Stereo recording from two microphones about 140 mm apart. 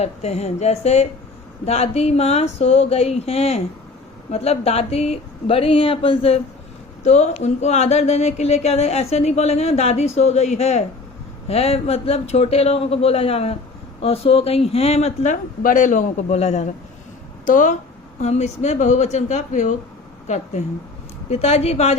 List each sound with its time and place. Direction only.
0.0 s speech: 50° left (ahead or behind); by 16.2 s 70° left (ahead or behind)
16.3 s speech: 50° left (ahead or behind)
17.4 s speech: 70° left (ahead or behind)
18.2 s a woman's voice: 55° left (ahead or behind)